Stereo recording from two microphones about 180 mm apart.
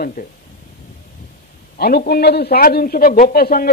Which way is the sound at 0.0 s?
50° left (ahead or behind).